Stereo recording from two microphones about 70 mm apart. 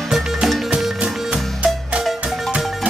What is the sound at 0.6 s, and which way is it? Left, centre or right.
Music, centre.